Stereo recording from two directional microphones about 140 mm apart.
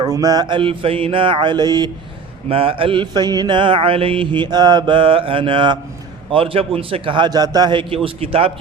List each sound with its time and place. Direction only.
0.0 s mantra: 25° right (ahead or behind)
2.5 s mantra: 40° right (ahead or behind)